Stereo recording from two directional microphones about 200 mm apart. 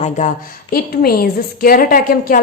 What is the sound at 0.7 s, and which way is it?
A woman's voice, 50° left (ahead or behind).